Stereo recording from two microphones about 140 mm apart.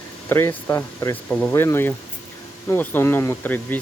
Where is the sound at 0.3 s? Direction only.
20° left (ahead or behind).